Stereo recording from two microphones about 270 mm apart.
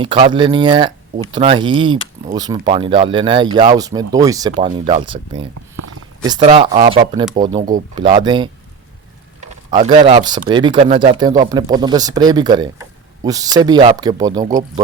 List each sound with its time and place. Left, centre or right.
0.0 s speech: centre
5.7 s a sound: right
6.2 s speech: centre
9.7 s speech: right